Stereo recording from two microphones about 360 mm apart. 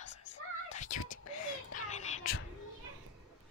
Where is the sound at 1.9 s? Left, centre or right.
Centre.